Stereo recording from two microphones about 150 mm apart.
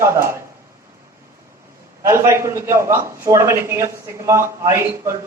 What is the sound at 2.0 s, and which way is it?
A man's voice, 20° right (ahead or behind).